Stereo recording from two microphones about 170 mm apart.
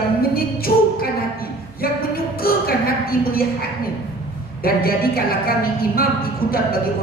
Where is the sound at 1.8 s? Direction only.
60° left (ahead or behind).